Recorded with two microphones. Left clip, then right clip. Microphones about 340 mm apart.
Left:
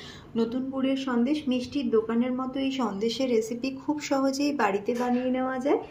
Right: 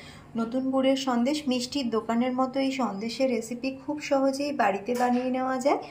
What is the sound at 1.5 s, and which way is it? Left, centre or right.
Speech, right.